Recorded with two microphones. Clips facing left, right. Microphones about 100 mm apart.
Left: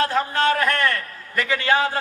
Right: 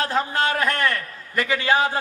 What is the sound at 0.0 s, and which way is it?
A man's voice, 20° right (ahead or behind).